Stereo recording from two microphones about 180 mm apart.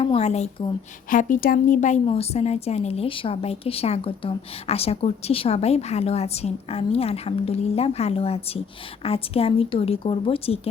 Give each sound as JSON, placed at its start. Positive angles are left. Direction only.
{"t": 0.0, "sound": "a woman's voice", "side_deg": 35}